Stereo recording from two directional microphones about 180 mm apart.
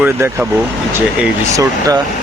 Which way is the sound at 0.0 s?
10° right (ahead or behind).